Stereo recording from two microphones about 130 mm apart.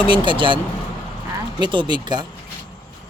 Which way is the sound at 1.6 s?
35° right (ahead or behind).